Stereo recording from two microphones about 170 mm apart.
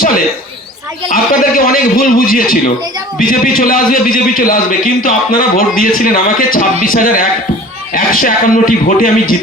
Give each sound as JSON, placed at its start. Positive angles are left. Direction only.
{"t": 1.1, "sound": "a man's voice", "side_deg": 55}